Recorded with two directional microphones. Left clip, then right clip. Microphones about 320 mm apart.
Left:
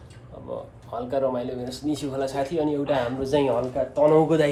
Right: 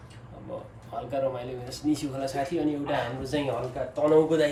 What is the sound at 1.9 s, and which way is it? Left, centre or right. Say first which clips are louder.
A man's voice: left 2 dB; centre.